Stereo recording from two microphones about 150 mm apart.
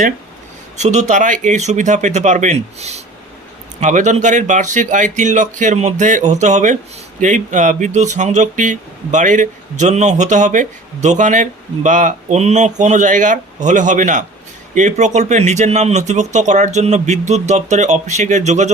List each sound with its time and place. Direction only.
0.8 s speech: 50° right (ahead or behind)